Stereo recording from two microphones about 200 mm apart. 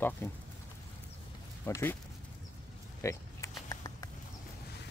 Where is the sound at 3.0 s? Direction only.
15° left (ahead or behind).